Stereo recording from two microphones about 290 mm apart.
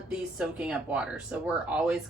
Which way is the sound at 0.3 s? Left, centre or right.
Centre.